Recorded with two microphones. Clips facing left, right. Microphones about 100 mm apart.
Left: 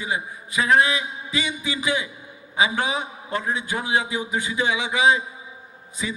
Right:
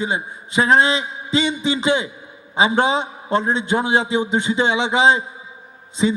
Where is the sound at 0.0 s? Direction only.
30° right (ahead or behind).